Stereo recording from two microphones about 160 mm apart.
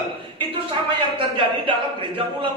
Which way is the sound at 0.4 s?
35° right (ahead or behind).